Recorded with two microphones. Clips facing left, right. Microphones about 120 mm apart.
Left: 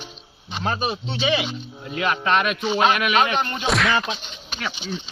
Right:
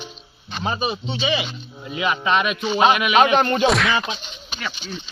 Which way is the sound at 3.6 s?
Centre (ahead or behind).